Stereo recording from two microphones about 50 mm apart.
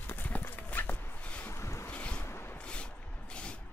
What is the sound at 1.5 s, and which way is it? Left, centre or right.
Boat, left.